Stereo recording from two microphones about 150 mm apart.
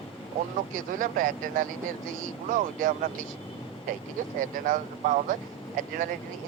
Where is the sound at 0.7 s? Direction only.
65° right (ahead or behind).